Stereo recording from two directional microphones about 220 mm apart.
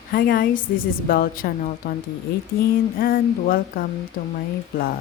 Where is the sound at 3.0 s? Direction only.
40° left (ahead or behind).